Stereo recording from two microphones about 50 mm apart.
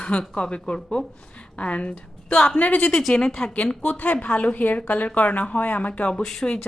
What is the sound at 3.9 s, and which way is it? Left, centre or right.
Speech, left.